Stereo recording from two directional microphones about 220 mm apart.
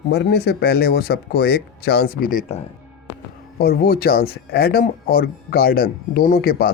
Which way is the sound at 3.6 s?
45° left (ahead or behind).